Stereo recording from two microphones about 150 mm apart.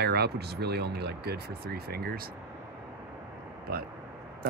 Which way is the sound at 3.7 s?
90° right.